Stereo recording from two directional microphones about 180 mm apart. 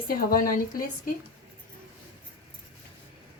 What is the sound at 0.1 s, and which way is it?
Speech, 55° left (ahead or behind).